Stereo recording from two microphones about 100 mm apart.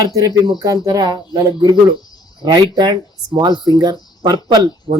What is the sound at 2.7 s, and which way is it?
Speech, 50° right (ahead or behind).